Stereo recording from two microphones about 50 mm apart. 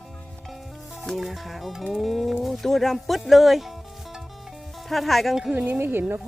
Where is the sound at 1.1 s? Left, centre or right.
Centre.